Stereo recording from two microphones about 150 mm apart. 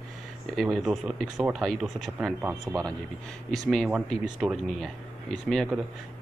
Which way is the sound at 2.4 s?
10° right (ahead or behind).